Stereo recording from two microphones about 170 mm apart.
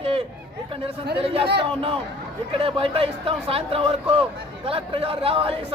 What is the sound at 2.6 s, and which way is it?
A man's voice, 35° right (ahead or behind).